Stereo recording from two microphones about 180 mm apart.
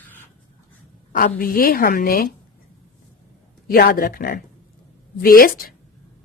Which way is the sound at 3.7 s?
55° left (ahead or behind).